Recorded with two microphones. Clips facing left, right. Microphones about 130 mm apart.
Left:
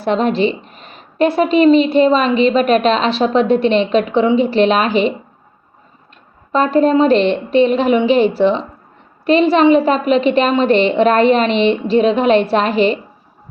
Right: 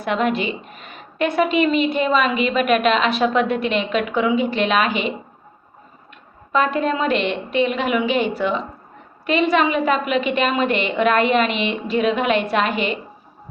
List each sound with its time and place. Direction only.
0.0 s a woman's voice: 30° left (ahead or behind)
6.5 s a woman's voice: 35° left (ahead or behind)